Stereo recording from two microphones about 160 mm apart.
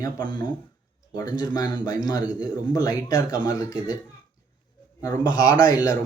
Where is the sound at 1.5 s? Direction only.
25° left (ahead or behind).